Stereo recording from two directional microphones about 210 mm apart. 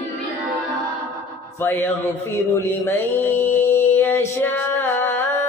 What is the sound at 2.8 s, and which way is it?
Mantra, 10° left (ahead or behind).